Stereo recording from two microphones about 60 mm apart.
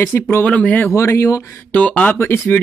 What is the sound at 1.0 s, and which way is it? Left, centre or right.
Speech, left.